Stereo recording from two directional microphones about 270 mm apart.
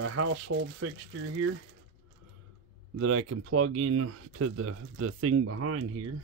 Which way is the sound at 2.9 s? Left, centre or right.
Right.